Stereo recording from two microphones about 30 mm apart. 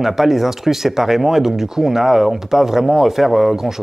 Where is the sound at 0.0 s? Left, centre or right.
Centre.